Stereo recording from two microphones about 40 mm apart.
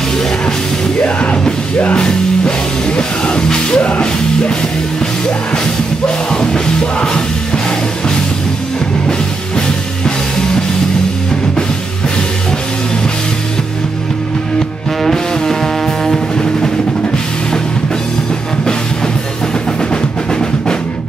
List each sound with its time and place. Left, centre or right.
1.0 s music: left
3.0 s music: centre
6.0 s music: centre
15.0 s music: centre
19.9 s music: centre